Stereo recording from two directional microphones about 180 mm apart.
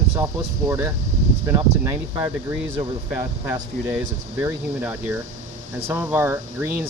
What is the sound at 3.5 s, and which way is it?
Speech, 15° right (ahead or behind).